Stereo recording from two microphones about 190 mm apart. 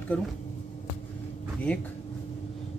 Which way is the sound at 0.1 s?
5° left (ahead or behind).